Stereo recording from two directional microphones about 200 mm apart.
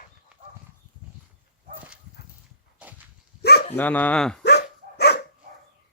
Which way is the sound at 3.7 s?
10° left (ahead or behind).